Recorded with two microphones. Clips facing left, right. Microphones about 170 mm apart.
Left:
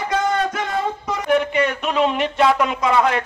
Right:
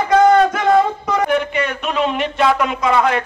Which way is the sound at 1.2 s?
35° left (ahead or behind).